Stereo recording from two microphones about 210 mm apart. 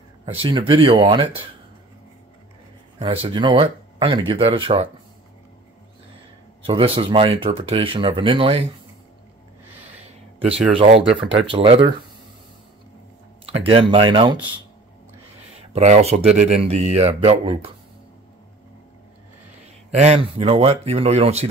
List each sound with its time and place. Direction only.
0.2 s speech: 25° right (ahead or behind)
3.0 s speech: 25° right (ahead or behind)
6.6 s speech: 25° right (ahead or behind)
10.7 s speech: 25° right (ahead or behind)
13.5 s speech: 25° right (ahead or behind)
15.7 s speech: 30° right (ahead or behind)
19.9 s speech: 30° right (ahead or behind)